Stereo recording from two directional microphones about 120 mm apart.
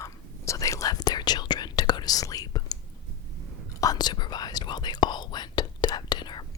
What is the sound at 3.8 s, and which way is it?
Whispering, 35° left (ahead or behind).